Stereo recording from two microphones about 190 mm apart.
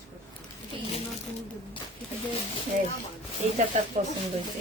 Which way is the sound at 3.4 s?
40° right (ahead or behind).